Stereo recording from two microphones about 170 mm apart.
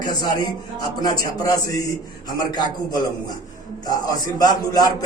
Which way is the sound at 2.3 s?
25° left (ahead or behind).